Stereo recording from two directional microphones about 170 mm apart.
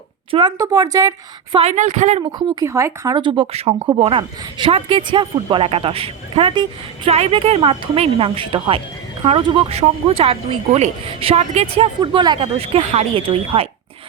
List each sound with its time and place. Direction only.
0.3 s speech: 30° right (ahead or behind)
1.5 s a woman's voice: 40° right (ahead or behind)
2.6 s a woman's voice: 15° right (ahead or behind); by 13.7 s 35° right (ahead or behind)